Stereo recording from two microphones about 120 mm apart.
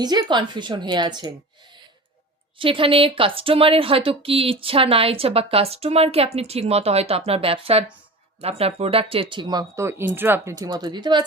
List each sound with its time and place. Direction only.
0.0 s speech: 35° right (ahead or behind)
2.6 s speech: 50° right (ahead or behind)
9.8 s speech: 20° right (ahead or behind)
10.6 s speech: 35° right (ahead or behind)